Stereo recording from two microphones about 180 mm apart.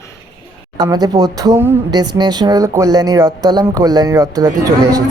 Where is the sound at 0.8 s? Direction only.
20° right (ahead or behind).